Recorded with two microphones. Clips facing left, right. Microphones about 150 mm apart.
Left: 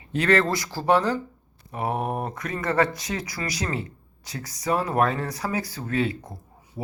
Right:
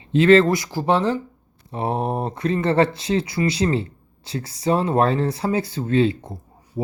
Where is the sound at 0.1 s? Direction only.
20° right (ahead or behind).